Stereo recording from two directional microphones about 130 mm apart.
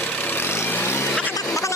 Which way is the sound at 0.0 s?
15° left (ahead or behind).